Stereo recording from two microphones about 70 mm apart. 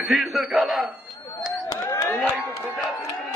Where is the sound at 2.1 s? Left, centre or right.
Left.